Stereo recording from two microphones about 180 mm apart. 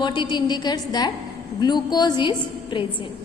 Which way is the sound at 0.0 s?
25° left (ahead or behind).